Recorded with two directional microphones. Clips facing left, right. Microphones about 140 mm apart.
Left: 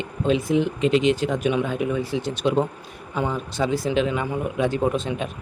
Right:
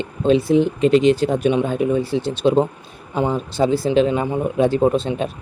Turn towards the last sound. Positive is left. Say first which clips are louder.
# right 6 dB
turn(degrees=-30)  # may be behind; listen again after turning